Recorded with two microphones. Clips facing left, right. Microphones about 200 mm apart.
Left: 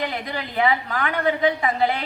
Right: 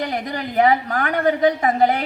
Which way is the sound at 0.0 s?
45° right (ahead or behind).